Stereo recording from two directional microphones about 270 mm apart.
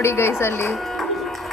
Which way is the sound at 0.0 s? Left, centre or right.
Centre.